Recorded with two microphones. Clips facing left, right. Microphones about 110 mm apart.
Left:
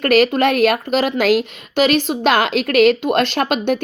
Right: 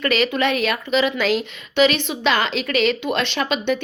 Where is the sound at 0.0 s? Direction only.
45° left (ahead or behind).